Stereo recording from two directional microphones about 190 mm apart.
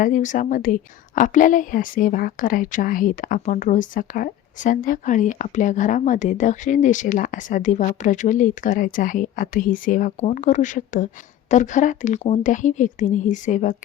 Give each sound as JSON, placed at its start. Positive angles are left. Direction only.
{"t": 0.0, "sound": "a woman's voice", "side_deg": 40}